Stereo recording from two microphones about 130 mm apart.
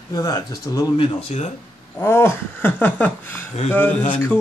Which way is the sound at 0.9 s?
60° left (ahead or behind).